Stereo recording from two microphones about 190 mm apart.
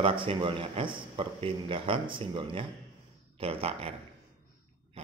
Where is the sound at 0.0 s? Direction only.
25° right (ahead or behind).